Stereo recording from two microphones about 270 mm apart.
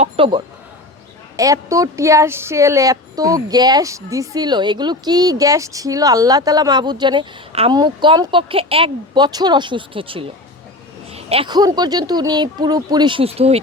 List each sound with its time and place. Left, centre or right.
0.0 s speech: centre